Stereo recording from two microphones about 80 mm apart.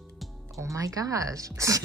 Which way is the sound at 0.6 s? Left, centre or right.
Right.